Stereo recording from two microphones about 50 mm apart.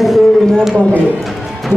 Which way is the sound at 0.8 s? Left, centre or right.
Left.